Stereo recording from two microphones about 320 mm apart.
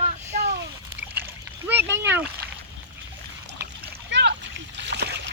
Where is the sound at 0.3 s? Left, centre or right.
Right.